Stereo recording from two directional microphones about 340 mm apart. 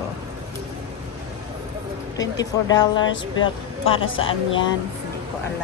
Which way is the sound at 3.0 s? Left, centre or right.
Left.